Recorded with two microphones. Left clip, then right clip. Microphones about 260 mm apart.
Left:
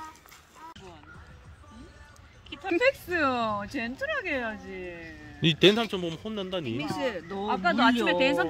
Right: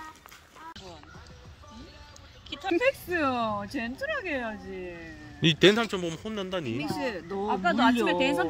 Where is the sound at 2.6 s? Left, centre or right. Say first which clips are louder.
Left 1 dB; centre.